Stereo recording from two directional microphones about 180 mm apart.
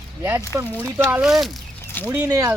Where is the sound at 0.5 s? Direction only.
15° right (ahead or behind).